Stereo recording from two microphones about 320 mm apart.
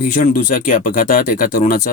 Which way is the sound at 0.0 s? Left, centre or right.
Left.